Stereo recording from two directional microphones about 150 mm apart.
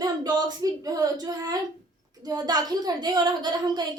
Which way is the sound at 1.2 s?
25° right (ahead or behind).